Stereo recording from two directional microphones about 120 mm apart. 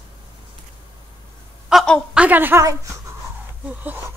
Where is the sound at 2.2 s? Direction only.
15° right (ahead or behind).